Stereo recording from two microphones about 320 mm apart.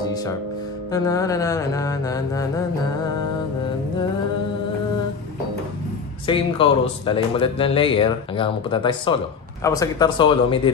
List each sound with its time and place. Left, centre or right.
0.9 s speech: centre
6.2 s speech: centre